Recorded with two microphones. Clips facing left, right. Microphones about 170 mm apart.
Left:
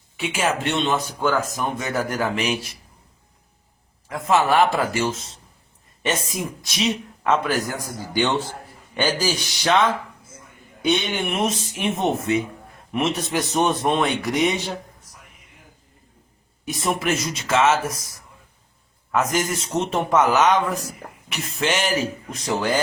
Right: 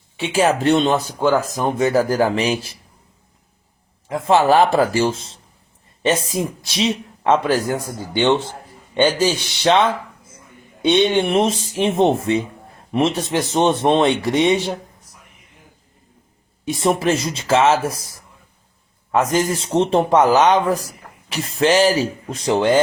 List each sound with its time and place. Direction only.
0.2 s speech: 30° right (ahead or behind)
4.1 s speech: 30° right (ahead or behind)
16.6 s speech: 30° right (ahead or behind)